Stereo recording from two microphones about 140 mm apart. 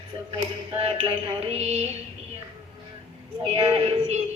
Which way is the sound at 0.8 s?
40° right (ahead or behind).